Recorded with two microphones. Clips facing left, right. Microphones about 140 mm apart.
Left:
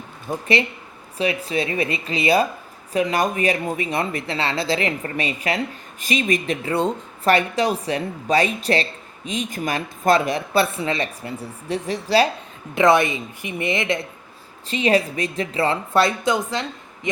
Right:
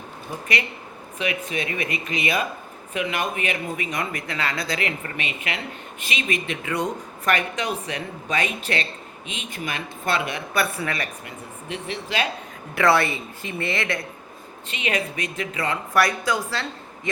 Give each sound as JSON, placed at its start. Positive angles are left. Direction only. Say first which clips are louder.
{"t": 0.3, "sound": "a woman's voice", "louder": "left 7 dB", "side_deg": 40}
{"t": 12.7, "sound": "a woman's voice", "louder": "left 3 dB", "side_deg": 20}
{"t": 14.7, "sound": "a woman's voice", "louder": "left 8 dB", "side_deg": 35}